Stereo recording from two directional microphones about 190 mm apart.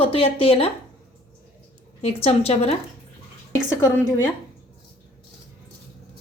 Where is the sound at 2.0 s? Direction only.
30° left (ahead or behind).